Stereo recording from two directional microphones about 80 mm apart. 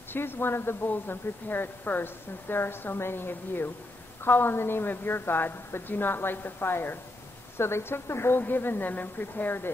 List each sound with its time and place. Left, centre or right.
0.1 s speech: left